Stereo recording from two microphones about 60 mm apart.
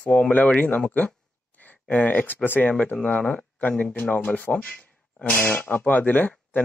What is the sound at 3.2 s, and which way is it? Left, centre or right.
Speech, centre.